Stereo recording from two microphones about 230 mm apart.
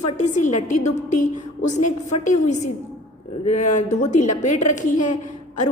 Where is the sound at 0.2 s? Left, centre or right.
Left.